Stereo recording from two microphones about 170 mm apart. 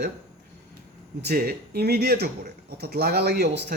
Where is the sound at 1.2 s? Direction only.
65° right (ahead or behind).